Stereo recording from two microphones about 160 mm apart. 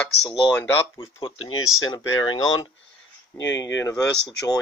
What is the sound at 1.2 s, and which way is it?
Speech, 30° left (ahead or behind).